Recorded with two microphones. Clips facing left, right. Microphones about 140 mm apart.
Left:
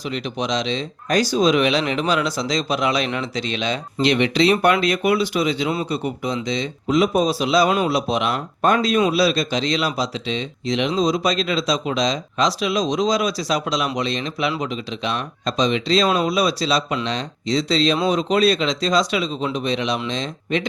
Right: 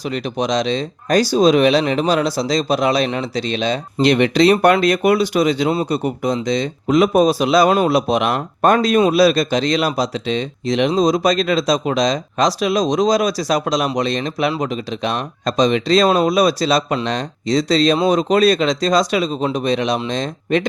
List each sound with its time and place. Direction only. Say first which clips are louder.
0.0 s speech: right 4 dB; 40° right (ahead or behind)